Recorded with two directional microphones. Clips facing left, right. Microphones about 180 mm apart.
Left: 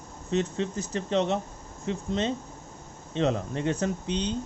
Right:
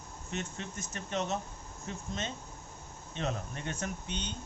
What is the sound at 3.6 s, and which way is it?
Speech, 30° left (ahead or behind).